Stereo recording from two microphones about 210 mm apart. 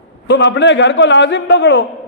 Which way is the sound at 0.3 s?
55° left (ahead or behind).